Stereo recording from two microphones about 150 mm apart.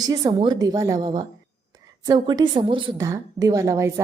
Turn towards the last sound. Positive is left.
turn(degrees=-20)  # may be behind; listen again after turning